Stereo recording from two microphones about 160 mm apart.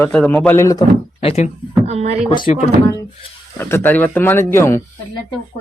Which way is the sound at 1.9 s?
45° right (ahead or behind).